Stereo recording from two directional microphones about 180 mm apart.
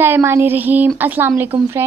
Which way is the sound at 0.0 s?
15° right (ahead or behind).